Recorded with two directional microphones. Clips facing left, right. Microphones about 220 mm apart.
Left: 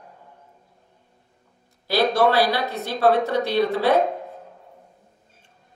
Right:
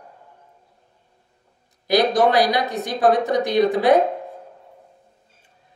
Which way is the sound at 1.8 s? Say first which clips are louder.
Right 2 dB; 15° right (ahead or behind).